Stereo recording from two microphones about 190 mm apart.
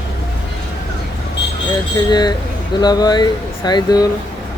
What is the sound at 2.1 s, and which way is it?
Speech, 20° left (ahead or behind).